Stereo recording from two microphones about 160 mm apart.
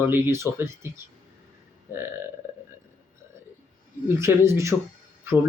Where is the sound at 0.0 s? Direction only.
15° right (ahead or behind).